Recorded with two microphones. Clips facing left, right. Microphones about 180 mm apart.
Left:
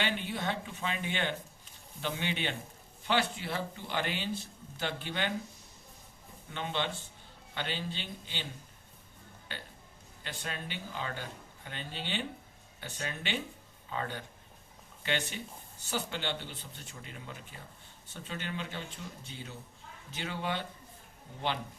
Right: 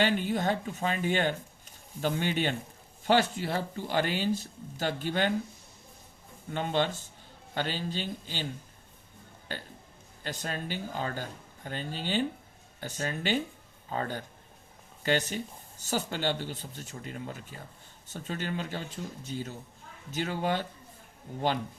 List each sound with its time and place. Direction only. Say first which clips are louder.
0.0 s speech: right 7 dB; 45° right (ahead or behind)
6.5 s speech: right 6 dB; 45° right (ahead or behind)
9.5 s speech: right 6 dB; 40° right (ahead or behind)